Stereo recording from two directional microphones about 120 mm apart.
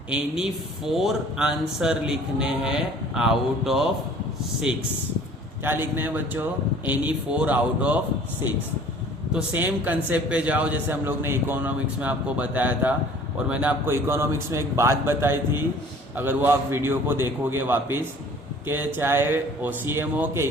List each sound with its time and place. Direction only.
0.1 s a man's voice: 5° right (ahead or behind)
9.3 s a man's voice: 15° right (ahead or behind)